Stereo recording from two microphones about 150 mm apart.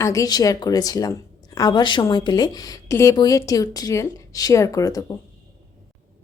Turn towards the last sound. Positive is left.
turn(degrees=25)  # may be behind; listen again after turning